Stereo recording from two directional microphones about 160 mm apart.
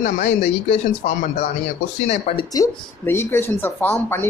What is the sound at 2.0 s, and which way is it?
Speech, 40° left (ahead or behind).